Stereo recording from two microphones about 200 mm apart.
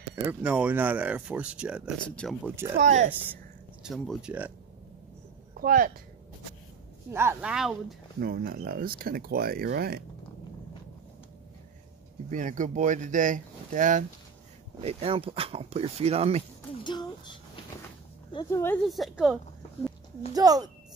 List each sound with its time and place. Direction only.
0.1 s speech: 10° right (ahead or behind)
2.0 s speech: 5° left (ahead or behind)
2.4 s speech: 15° right (ahead or behind)
2.8 s speech: 35° right (ahead or behind)
3.1 s speech: 10° right (ahead or behind)
5.6 s speech: 45° right (ahead or behind)
7.1 s speech: 15° right (ahead or behind)
8.2 s speech: 50° right (ahead or behind)
12.3 s speech: 40° right (ahead or behind)
16.8 s speech: 20° left (ahead or behind); by 19.9 s centre (ahead or behind)
20.3 s speech: 20° right (ahead or behind)